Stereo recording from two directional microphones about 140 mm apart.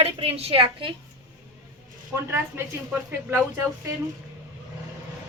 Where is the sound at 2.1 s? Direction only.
20° right (ahead or behind).